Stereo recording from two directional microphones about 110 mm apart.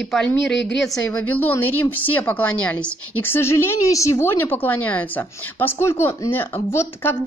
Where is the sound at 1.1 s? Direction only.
15° left (ahead or behind).